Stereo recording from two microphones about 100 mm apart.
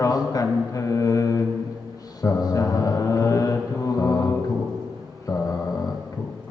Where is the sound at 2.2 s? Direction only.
35° left (ahead or behind).